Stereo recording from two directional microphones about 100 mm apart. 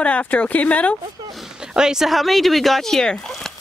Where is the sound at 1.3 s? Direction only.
5° right (ahead or behind).